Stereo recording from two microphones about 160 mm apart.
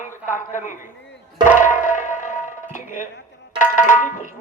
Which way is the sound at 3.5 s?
55° left (ahead or behind).